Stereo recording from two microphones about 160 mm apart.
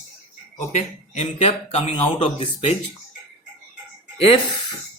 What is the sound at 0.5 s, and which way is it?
Speech, 45° left (ahead or behind).